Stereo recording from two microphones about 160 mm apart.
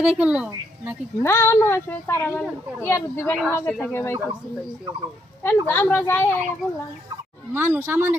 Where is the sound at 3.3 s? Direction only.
5° left (ahead or behind).